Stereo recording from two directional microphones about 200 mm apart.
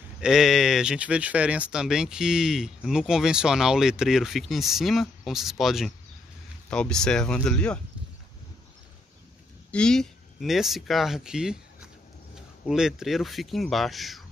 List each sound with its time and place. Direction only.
0.2 s speech: centre (ahead or behind)
9.7 s speech: 5° left (ahead or behind)